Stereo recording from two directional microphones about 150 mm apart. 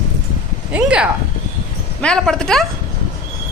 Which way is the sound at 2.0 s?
5° left (ahead or behind).